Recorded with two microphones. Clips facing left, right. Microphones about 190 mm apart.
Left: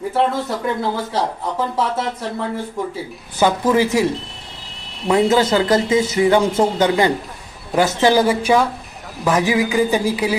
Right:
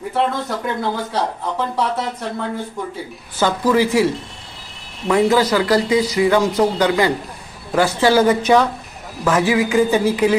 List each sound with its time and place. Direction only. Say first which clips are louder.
0.1 s speech: left 1 dB; centre (ahead or behind)
3.4 s speech: left 1 dB; 20° left (ahead or behind)
7.8 s a sound: even; 20° left (ahead or behind)